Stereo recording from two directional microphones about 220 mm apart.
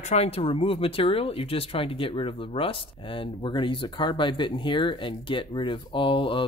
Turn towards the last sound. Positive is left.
turn(degrees=25)  # may be behind; listen again after turning